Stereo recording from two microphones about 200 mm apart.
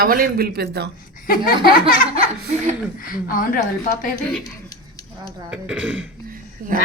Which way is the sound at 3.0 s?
45° left (ahead or behind).